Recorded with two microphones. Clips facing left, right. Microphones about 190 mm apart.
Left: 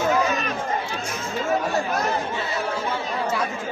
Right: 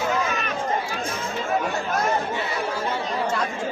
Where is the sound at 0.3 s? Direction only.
35° left (ahead or behind).